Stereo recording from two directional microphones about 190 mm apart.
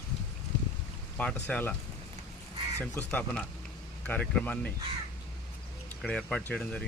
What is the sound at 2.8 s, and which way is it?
Speech, 5° left (ahead or behind).